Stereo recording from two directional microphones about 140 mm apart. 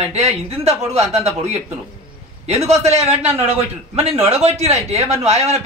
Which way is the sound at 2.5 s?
50° right (ahead or behind).